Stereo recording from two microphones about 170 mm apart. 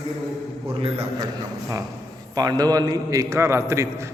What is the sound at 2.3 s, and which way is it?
A man's voice, 25° right (ahead or behind).